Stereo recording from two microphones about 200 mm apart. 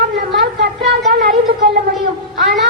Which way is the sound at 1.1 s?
55° right (ahead or behind).